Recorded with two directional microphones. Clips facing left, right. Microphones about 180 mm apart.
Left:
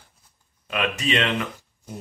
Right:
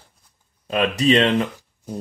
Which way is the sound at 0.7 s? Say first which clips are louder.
Right 7 dB; 35° right (ahead or behind).